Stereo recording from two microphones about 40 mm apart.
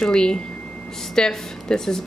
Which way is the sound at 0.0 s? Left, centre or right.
Centre.